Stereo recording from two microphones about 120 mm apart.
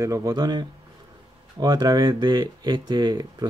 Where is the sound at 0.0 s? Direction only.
30° right (ahead or behind).